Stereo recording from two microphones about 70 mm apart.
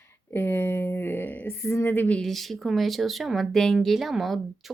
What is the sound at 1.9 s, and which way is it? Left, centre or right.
Speech, left.